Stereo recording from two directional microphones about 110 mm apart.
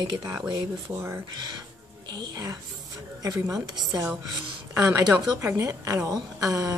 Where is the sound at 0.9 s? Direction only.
25° right (ahead or behind).